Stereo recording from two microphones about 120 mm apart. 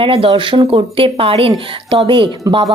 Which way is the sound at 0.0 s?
50° right (ahead or behind).